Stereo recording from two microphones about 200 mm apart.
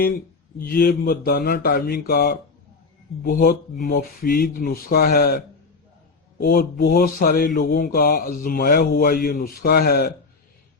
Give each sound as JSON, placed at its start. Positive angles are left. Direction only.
{"t": 0.6, "sound": "mantra", "side_deg": 50}
{"t": 6.4, "sound": "mantra", "side_deg": 50}